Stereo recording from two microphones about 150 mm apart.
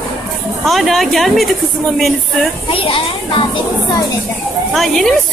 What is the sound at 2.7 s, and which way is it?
Speech, 35° left (ahead or behind).